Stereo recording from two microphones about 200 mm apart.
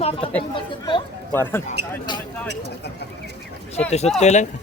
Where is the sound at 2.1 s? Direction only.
20° left (ahead or behind).